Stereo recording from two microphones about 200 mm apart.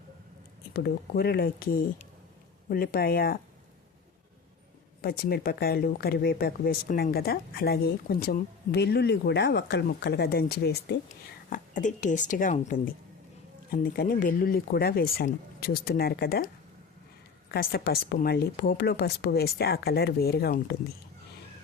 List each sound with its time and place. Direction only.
0.7 s speech: 50° left (ahead or behind)
5.0 s speech: 50° left (ahead or behind)
11.4 s speech: 40° left (ahead or behind)
17.5 s speech: 50° left (ahead or behind)